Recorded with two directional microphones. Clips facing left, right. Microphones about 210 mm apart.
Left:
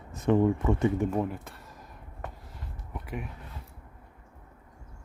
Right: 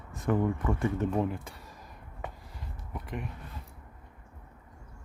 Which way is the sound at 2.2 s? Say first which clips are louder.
Even; centre (ahead or behind).